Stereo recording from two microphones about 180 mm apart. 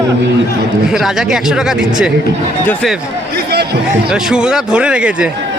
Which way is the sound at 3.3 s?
65° right (ahead or behind).